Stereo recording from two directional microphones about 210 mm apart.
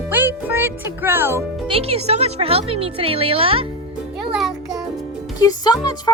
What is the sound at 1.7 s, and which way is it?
Speech, 30° right (ahead or behind).